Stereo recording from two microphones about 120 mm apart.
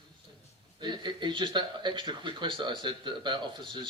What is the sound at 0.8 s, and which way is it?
Speech, 40° right (ahead or behind).